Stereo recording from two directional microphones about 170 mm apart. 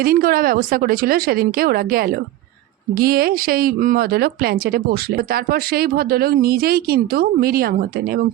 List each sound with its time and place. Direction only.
0.0 s speech: 55° right (ahead or behind)